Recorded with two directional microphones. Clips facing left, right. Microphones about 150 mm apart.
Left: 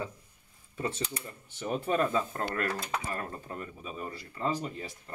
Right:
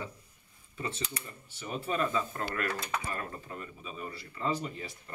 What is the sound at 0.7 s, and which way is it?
Speech, 40° left (ahead or behind).